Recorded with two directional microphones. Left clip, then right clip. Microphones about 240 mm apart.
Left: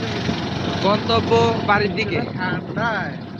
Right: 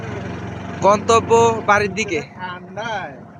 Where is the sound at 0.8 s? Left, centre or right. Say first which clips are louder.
Right 6 dB; right.